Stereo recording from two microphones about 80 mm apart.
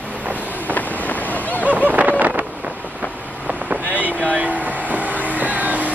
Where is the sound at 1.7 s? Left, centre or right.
Right.